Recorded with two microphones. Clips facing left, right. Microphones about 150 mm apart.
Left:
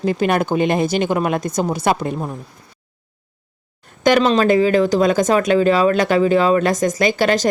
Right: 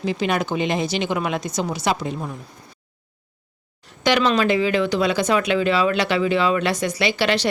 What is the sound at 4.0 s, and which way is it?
Speech, 45° left (ahead or behind).